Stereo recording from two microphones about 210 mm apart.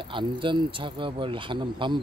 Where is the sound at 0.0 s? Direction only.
25° right (ahead or behind).